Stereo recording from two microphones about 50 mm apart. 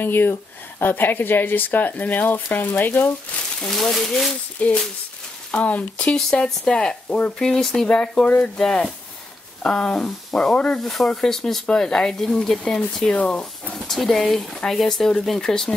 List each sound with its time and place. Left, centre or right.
0.0 s speech: left
3.6 s speech: centre
4.6 s speech: left
6.0 s speech: centre
10.8 s speech: centre
11.1 s speech: centre
13.1 s speech: left
13.7 s speech: centre